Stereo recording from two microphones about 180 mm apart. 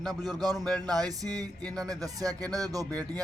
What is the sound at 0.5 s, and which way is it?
Speech, 5° left (ahead or behind).